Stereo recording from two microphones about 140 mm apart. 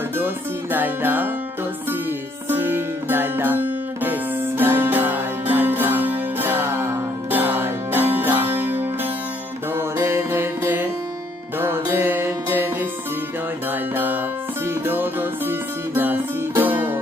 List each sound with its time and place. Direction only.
0.2 s music: 15° right (ahead or behind)
9.7 s music: 20° right (ahead or behind)
16.6 s music: 15° right (ahead or behind)